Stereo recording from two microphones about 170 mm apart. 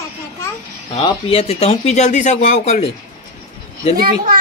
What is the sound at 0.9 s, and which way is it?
Speech, 35° left (ahead or behind).